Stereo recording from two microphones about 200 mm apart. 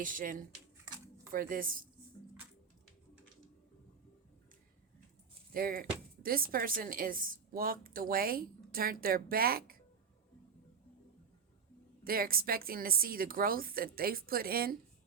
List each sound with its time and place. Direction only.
0.0 s speech: 45° right (ahead or behind)
5.5 s speech: 45° right (ahead or behind)
12.0 s speech: 45° right (ahead or behind)